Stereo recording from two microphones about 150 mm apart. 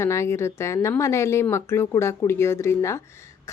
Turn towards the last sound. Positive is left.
turn(degrees=20)  # may be behind; listen again after turning